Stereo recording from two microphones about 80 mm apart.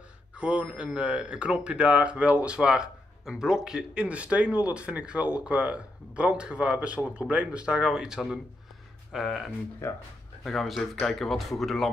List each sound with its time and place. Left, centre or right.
0.4 s speech: centre
9.8 s speech: left
10.4 s speech: centre